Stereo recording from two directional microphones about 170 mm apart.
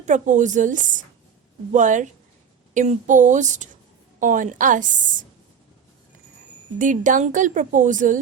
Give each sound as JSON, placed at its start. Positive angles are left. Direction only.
{"t": 0.0, "sound": "a woman's voice", "side_deg": -45}
{"t": 6.7, "sound": "a woman's voice", "side_deg": -50}